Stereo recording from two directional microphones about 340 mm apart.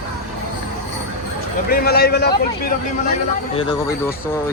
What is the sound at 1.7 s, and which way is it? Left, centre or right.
Speech, left.